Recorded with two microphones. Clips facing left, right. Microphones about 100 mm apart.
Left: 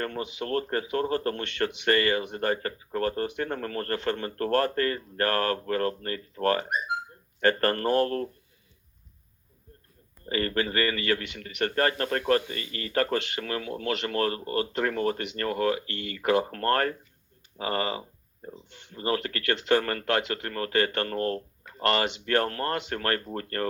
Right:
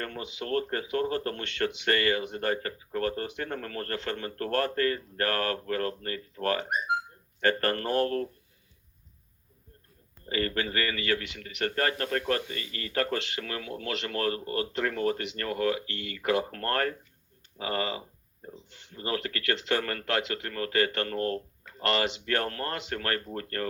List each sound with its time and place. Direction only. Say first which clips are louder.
0.3 s speech: even; 35° left (ahead or behind)
10.2 s speech: left 2 dB; 35° left (ahead or behind)